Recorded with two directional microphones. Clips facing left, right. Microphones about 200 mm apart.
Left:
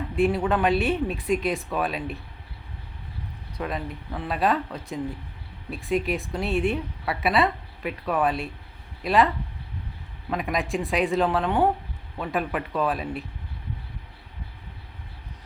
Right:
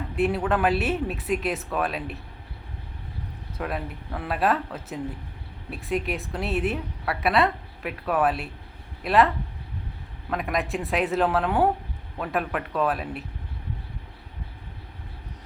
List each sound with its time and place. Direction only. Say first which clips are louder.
0.2 s a woman's voice: left 1 dB; centre (ahead or behind)
3.6 s a woman's voice: even; 5° right (ahead or behind)